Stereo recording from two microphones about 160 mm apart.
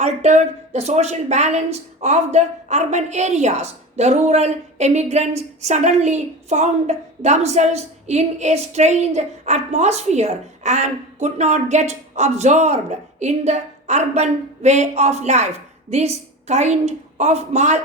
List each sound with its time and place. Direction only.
0.0 s a woman's voice: 45° right (ahead or behind)